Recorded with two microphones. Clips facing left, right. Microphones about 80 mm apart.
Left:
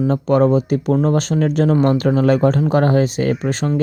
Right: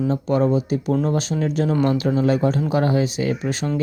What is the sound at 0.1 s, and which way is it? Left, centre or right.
Speech, left.